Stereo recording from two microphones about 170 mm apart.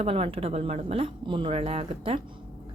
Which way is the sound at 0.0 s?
35° right (ahead or behind).